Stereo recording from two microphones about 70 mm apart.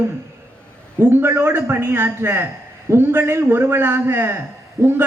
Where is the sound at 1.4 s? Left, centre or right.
Right.